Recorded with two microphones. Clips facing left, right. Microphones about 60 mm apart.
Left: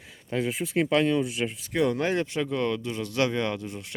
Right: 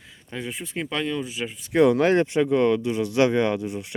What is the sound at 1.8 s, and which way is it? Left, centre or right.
Speech, right.